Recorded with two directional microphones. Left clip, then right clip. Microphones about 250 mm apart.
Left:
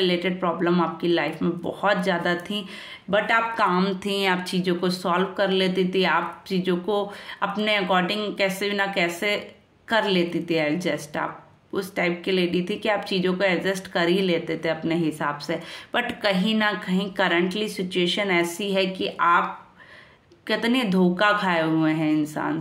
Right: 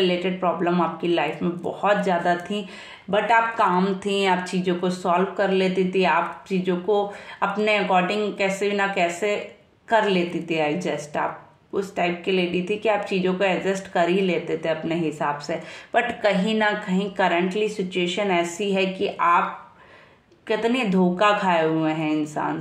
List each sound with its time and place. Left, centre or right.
0.0 s speech: left
20.4 s speech: left